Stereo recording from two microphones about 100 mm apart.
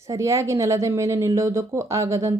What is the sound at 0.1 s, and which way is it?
A woman's voice, 30° right (ahead or behind).